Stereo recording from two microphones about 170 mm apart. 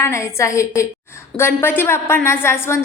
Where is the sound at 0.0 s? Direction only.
15° left (ahead or behind).